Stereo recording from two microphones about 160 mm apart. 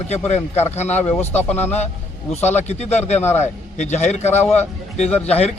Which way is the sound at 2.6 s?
45° left (ahead or behind).